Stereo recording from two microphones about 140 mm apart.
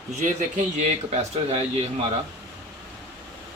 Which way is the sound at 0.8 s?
50° right (ahead or behind).